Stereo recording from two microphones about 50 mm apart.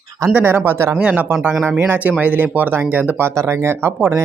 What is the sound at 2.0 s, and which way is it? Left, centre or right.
Speech, right.